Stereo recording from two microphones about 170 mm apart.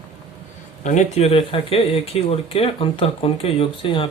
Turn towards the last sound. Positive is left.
turn(degrees=30)  # may be behind; listen again after turning